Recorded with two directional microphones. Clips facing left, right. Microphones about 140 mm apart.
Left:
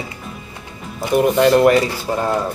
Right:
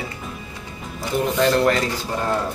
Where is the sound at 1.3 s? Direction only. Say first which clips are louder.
Left 5 dB; 15° left (ahead or behind).